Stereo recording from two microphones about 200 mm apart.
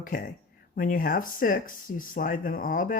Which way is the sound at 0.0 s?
45° left (ahead or behind).